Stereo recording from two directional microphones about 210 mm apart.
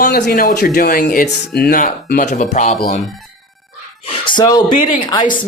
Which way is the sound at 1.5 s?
55° left (ahead or behind).